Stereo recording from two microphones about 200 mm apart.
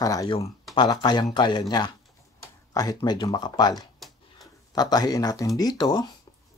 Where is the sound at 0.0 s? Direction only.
15° left (ahead or behind).